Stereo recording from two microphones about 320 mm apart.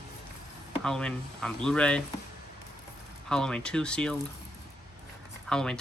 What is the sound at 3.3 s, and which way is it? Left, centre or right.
Speech, centre.